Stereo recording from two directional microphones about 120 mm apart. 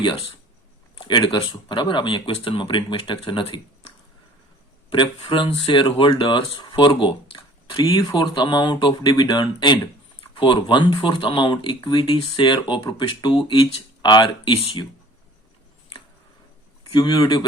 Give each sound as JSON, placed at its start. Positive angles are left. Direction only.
{"t": 0.0, "sound": "speech", "side_deg": 40}
{"t": 16.9, "sound": "speech", "side_deg": 35}